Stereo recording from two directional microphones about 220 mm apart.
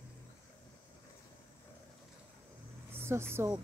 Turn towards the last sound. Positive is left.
turn(degrees=-10)  # may be behind; listen again after turning